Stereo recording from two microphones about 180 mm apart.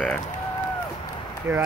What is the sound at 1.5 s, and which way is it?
Speech, 5° right (ahead or behind).